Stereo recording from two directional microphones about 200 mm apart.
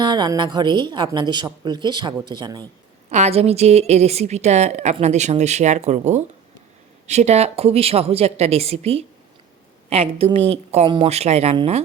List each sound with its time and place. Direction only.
0.0 s speech: 20° right (ahead or behind)
3.1 s a woman's voice: 35° right (ahead or behind)